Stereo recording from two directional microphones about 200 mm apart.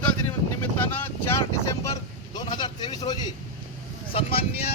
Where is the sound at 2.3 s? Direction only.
20° left (ahead or behind).